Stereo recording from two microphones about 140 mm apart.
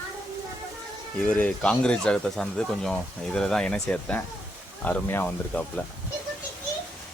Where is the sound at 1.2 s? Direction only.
5° left (ahead or behind).